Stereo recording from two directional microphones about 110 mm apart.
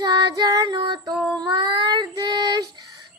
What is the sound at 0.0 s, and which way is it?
Female singing, 40° right (ahead or behind).